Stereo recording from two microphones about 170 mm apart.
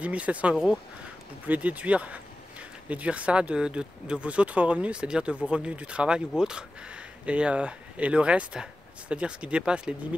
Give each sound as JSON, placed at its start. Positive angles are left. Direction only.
{"t": 0.0, "sound": "speech", "side_deg": -10}